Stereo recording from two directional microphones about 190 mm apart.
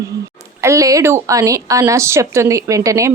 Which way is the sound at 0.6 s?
15° right (ahead or behind).